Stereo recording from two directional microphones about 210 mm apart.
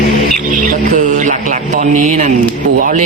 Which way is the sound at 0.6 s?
40° right (ahead or behind).